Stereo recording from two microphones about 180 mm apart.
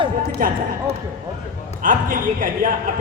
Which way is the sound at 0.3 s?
50° right (ahead or behind).